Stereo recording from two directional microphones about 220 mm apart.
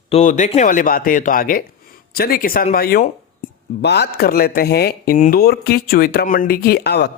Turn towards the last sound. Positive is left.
turn(degrees=50)  # may be behind; listen again after turning